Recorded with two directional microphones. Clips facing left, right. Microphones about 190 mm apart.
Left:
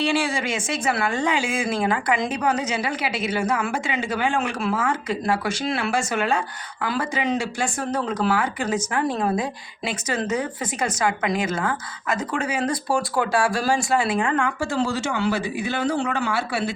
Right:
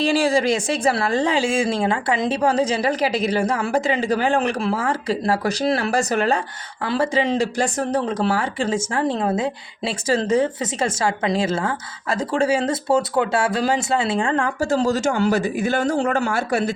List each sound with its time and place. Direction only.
0.0 s a woman's voice: 35° right (ahead or behind)